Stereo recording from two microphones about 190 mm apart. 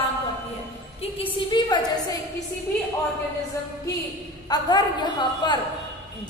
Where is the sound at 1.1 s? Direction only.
25° left (ahead or behind).